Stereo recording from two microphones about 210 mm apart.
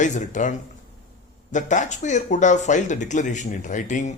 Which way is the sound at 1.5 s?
35° left (ahead or behind).